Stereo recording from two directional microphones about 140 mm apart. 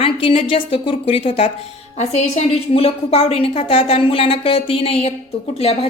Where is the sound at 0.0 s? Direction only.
40° left (ahead or behind).